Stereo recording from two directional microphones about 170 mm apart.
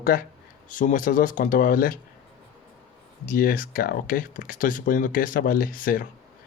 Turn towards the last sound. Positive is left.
turn(degrees=55)  # may be behind; listen again after turning